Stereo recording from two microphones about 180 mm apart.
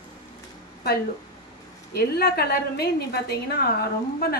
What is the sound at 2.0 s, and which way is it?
A woman's voice, 60° left (ahead or behind).